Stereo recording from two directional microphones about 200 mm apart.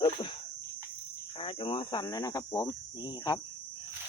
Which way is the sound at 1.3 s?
25° left (ahead or behind).